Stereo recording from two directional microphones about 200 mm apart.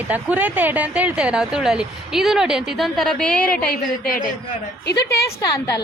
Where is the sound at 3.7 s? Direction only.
45° left (ahead or behind).